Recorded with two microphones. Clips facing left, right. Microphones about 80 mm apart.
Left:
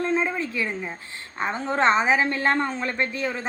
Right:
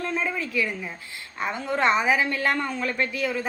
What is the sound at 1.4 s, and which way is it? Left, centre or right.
A woman's voice, left.